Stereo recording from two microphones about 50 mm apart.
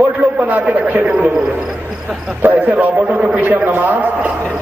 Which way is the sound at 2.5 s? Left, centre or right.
Right.